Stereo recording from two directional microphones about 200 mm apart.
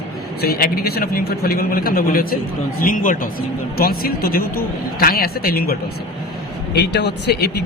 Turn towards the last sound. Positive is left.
turn(degrees=60)  # may be behind; listen again after turning